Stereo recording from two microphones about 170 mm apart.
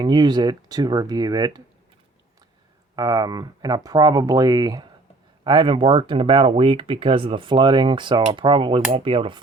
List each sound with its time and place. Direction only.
0.0 s speech: 25° right (ahead or behind)
2.9 s speech: 25° right (ahead or behind)